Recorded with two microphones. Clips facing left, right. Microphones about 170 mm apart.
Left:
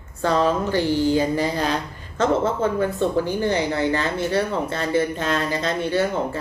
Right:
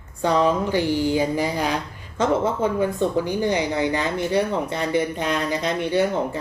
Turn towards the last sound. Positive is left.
turn(degrees=-15)  # may be behind; listen again after turning